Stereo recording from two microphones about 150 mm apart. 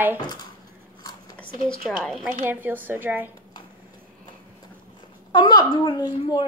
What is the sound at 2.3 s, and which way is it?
A woman's voice, 15° right (ahead or behind).